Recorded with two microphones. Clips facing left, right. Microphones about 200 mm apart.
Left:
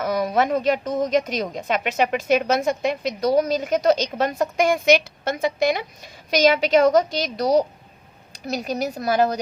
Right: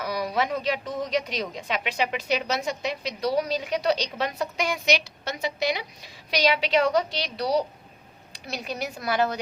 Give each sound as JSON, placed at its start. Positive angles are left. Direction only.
{"t": 0.0, "sound": "speech", "side_deg": 50}